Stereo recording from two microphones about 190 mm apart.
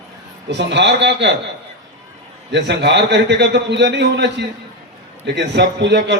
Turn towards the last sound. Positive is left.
turn(degrees=-65)  # may be behind; listen again after turning